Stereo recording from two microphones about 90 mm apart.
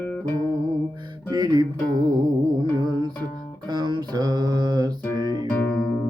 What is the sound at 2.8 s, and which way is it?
Music, 50° right (ahead or behind).